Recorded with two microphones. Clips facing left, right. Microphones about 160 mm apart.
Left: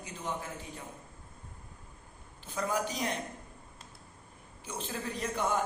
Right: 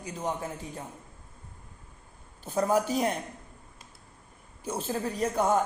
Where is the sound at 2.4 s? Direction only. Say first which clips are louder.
Right 7 dB; 40° right (ahead or behind).